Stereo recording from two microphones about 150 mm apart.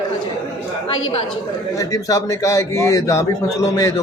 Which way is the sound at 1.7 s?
20° left (ahead or behind).